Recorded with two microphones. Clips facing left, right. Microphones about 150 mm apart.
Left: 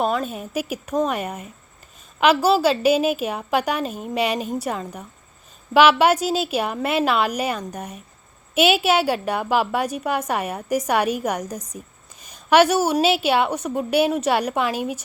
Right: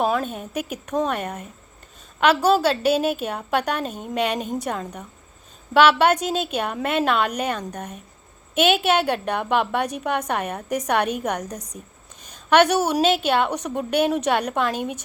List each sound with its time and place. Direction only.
0.0 s a woman's voice: centre (ahead or behind)